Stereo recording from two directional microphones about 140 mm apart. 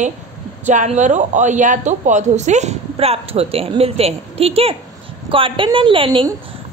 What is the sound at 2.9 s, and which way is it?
A woman's voice, 45° right (ahead or behind).